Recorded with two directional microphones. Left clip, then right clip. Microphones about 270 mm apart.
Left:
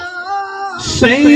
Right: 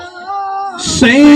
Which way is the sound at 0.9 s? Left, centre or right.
Right.